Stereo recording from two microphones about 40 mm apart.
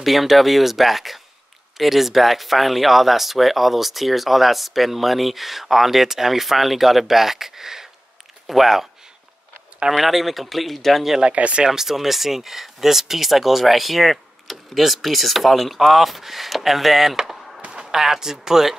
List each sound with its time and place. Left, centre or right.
0.0 s speech: centre
9.8 s speech: centre
11.3 s speech: right
11.6 s speech: centre